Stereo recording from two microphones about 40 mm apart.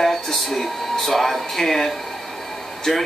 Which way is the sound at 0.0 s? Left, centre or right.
Centre.